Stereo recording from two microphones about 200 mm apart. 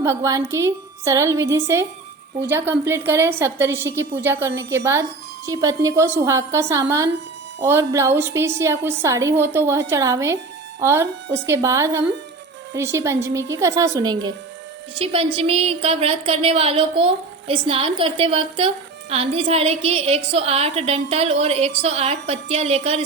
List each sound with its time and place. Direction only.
0.0 s a woman's voice: 15° right (ahead or behind); by 23.0 s 35° right (ahead or behind)